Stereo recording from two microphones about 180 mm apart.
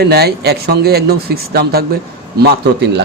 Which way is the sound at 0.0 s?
65° right (ahead or behind).